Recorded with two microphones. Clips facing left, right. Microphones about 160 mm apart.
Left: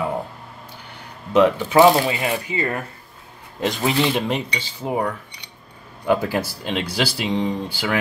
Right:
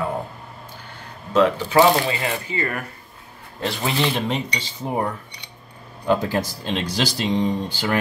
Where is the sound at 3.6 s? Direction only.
10° left (ahead or behind).